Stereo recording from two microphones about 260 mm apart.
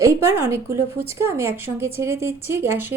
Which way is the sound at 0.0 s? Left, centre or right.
Centre.